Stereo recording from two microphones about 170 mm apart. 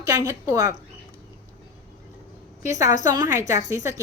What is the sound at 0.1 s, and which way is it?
Speech, 15° right (ahead or behind).